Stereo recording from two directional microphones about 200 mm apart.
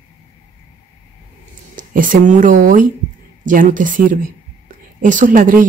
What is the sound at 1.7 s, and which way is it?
Speech, 40° right (ahead or behind).